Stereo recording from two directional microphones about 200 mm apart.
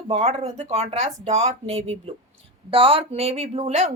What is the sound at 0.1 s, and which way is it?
Speech, 30° right (ahead or behind).